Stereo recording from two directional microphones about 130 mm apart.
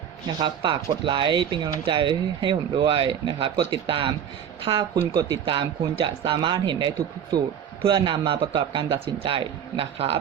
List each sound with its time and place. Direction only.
0.3 s a man's voice: 35° right (ahead or behind)